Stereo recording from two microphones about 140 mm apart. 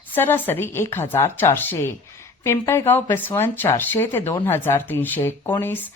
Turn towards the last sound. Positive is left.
turn(degrees=15)  # may be behind; listen again after turning